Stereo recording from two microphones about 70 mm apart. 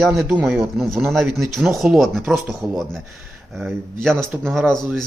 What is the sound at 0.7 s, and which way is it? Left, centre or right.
A man's voice, centre.